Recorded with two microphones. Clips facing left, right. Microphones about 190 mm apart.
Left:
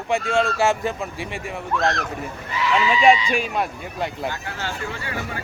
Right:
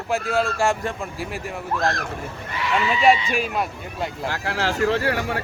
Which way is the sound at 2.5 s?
55° right (ahead or behind).